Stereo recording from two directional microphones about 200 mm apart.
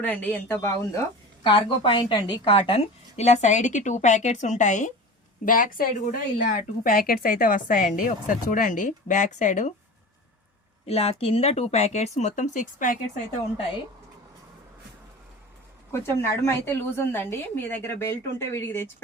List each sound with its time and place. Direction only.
0.0 s a woman's voice: 10° left (ahead or behind)
1.5 s a woman's voice: 25° left (ahead or behind)
10.8 s a woman's voice: 30° left (ahead or behind)
15.9 s a woman's voice: 15° left (ahead or behind)